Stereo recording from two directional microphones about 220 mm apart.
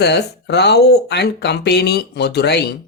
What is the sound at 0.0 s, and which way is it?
Speech, 50° left (ahead or behind).